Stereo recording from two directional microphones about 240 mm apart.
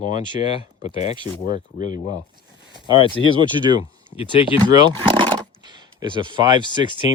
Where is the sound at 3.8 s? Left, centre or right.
Left.